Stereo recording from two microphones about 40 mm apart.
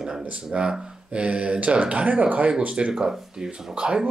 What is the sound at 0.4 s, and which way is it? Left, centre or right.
Speech, right.